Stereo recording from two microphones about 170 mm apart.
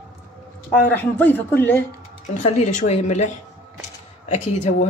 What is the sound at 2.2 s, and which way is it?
Speech, 45° left (ahead or behind).